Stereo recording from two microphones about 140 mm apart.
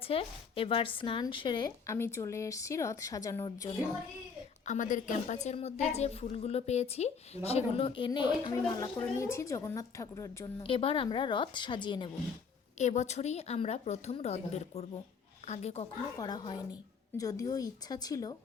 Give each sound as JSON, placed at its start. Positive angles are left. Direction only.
{"t": 0.1, "sound": "a woman's voice", "side_deg": 40}
{"t": 1.9, "sound": "speech", "side_deg": 20}
{"t": 4.6, "sound": "a woman's voice", "side_deg": 60}
{"t": 9.0, "sound": "speech", "side_deg": 20}
{"t": 10.6, "sound": "a woman's voice", "side_deg": 40}
{"t": 12.8, "sound": "a woman's voice", "side_deg": 55}
{"t": 16.1, "sound": "speech", "side_deg": 30}